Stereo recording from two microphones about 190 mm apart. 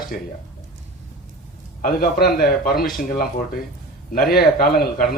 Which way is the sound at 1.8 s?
50° left (ahead or behind).